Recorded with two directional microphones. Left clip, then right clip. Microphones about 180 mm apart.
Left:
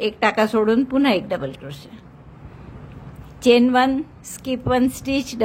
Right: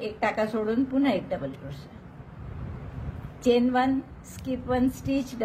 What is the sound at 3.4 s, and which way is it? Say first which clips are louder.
A woman's voice: left 8 dB; 40° left (ahead or behind).